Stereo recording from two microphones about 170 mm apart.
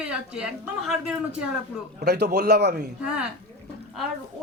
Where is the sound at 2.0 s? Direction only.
75° right (ahead or behind).